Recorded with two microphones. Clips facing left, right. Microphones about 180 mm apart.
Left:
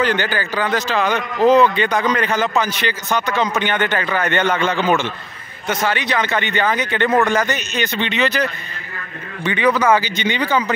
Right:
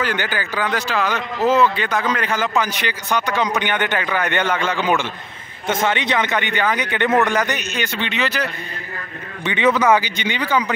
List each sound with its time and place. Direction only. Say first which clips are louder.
0.0 s a man's voice: left 4 dB; 10° right (ahead or behind)
5.7 s a man's voice: right 1 dB; 25° right (ahead or behind); by 8.5 s 5° right (ahead or behind)
9.4 s a man's voice: even; 20° right (ahead or behind)